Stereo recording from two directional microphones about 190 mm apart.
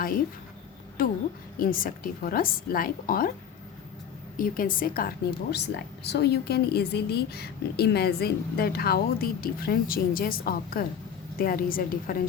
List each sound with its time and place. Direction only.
1.0 s a woman's voice: 50° left (ahead or behind)
4.4 s a woman's voice: 45° left (ahead or behind)
5.5 s a woman's voice: 60° left (ahead or behind)